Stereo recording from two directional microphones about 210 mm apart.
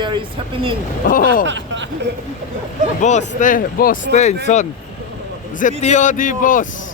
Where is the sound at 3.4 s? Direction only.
40° left (ahead or behind).